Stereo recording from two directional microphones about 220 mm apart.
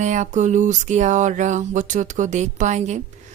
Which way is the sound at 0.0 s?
35° right (ahead or behind).